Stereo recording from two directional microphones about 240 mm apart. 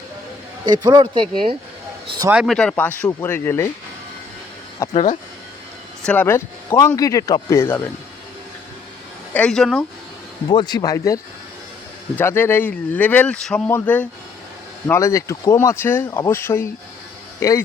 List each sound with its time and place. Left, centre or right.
0.6 s speech: centre
2.2 s speech: centre
4.8 s speech: centre
6.1 s speech: centre
9.3 s speech: centre
10.5 s speech: centre